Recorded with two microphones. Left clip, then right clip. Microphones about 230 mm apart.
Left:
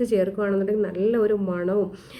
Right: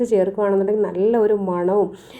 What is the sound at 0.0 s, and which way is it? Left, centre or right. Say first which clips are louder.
A woman's voice: right 5 dB; centre.